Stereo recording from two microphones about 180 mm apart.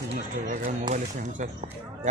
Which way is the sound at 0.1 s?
45° right (ahead or behind).